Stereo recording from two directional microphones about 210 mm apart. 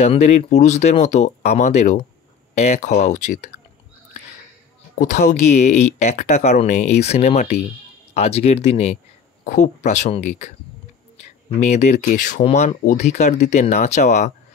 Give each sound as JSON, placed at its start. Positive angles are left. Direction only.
{"t": 0.0, "sound": "speech", "side_deg": 30}
{"t": 4.9, "sound": "speech", "side_deg": 35}
{"t": 11.6, "sound": "speech", "side_deg": 35}